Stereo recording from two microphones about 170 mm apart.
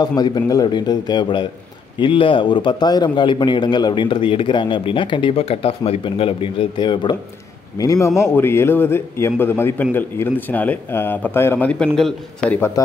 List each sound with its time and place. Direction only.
0.0 s a man's voice: 25° left (ahead or behind)